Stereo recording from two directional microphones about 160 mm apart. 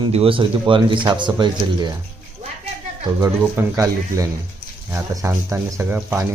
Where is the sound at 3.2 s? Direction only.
15° right (ahead or behind).